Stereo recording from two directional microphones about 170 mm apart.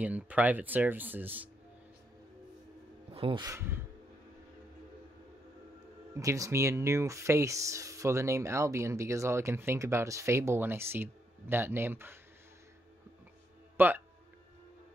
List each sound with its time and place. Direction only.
0.0 s speech: 10° right (ahead or behind)
3.1 s speech: 30° right (ahead or behind)
3.4 s speech: 15° right (ahead or behind)
6.1 s speech: 20° right (ahead or behind)
13.7 s speech: 10° right (ahead or behind)